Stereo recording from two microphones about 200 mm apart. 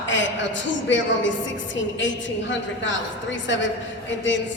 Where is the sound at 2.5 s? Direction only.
70° left (ahead or behind).